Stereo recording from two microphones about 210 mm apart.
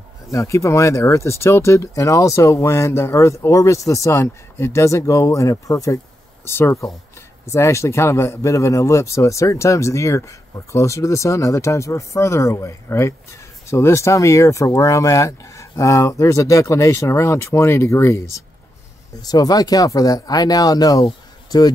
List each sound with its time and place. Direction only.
0.3 s speech: 15° left (ahead or behind)